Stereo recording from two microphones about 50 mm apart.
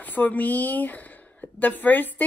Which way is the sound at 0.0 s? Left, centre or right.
Left.